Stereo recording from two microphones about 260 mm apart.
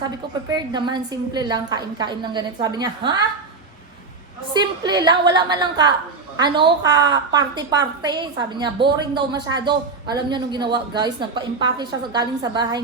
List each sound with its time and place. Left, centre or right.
0.5 s a woman's voice: centre
4.5 s a woman's voice: centre